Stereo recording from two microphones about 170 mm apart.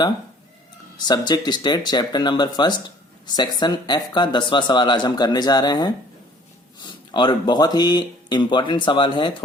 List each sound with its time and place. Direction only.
0.9 s speech: 25° left (ahead or behind)
7.1 s speech: 25° left (ahead or behind)